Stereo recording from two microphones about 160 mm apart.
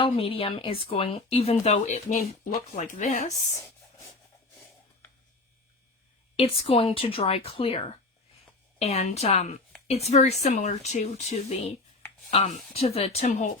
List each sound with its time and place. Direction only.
0.0 s speech: 35° left (ahead or behind)
6.3 s speech: 35° left (ahead or behind)
12.7 s speech: 40° left (ahead or behind)